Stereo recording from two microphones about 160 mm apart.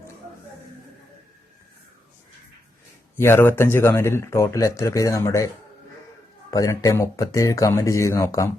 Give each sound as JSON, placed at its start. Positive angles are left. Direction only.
{"t": 3.2, "sound": "speech", "side_deg": 15}
{"t": 6.5, "sound": "speech", "side_deg": 20}